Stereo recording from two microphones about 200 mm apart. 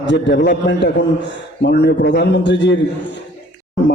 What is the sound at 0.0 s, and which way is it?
A woman's voice, 60° left (ahead or behind).